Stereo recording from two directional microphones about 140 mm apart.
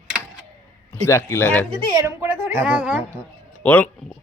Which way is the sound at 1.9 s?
15° right (ahead or behind).